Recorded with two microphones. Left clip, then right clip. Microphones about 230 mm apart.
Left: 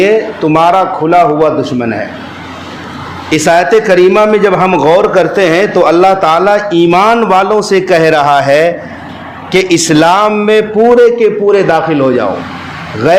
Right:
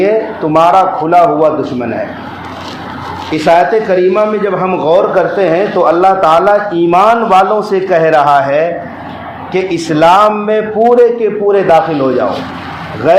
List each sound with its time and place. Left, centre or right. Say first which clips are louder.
0.0 s a man's voice: left 2 dB; left
3.4 s a man's voice: left 1 dB; left